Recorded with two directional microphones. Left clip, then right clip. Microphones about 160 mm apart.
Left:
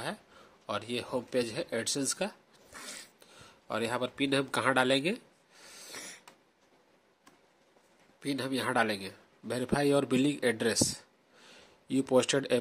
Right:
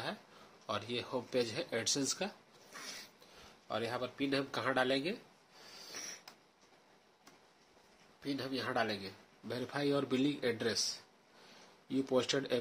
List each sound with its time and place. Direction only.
0.7 s speech: 35° left (ahead or behind)
3.6 s speech: 55° left (ahead or behind)
5.8 s snort: 60° left (ahead or behind)
8.2 s a man's voice: 65° left (ahead or behind); by 12.5 s 40° left (ahead or behind)